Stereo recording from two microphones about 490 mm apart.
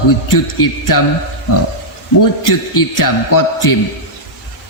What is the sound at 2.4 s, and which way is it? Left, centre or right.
A woman's voice, left.